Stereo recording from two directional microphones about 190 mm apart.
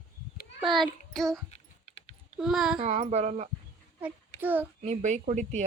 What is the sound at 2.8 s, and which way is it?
Speech, 35° right (ahead or behind).